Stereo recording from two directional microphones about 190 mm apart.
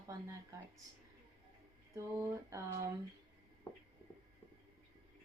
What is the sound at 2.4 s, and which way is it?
Speech, 15° right (ahead or behind).